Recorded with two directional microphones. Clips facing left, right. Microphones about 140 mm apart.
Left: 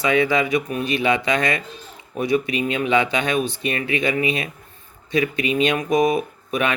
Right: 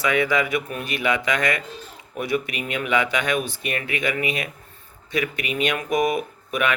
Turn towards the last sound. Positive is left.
turn(degrees=25)  # may be behind; listen again after turning